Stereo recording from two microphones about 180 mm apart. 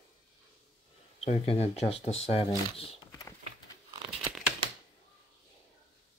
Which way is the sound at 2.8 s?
20° left (ahead or behind).